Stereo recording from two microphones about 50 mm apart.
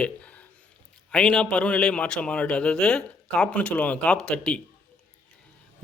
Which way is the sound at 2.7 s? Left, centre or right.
Centre.